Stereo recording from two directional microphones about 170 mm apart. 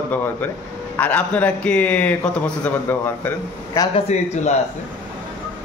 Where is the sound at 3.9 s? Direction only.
40° left (ahead or behind).